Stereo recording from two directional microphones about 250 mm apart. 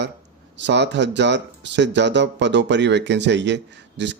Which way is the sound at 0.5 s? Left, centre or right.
Right.